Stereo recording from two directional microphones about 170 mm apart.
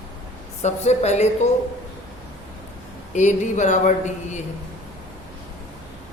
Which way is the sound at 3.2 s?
45° left (ahead or behind).